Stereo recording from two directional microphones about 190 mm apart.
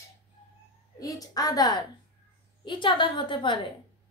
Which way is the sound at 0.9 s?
20° left (ahead or behind).